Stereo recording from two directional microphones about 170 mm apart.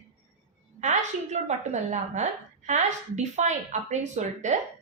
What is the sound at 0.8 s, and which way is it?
A woman's voice, 45° right (ahead or behind).